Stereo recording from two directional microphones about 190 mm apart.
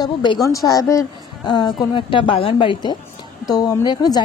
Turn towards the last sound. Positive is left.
turn(degrees=20)  # may be behind; listen again after turning